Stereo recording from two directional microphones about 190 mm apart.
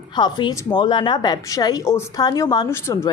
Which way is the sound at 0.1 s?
25° left (ahead or behind).